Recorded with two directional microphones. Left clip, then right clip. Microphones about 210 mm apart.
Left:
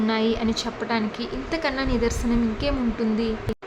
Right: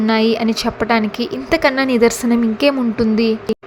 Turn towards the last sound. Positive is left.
turn(degrees=-30)  # may be behind; listen again after turning